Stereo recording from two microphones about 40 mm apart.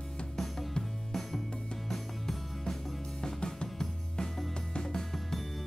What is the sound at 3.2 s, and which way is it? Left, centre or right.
Music, centre.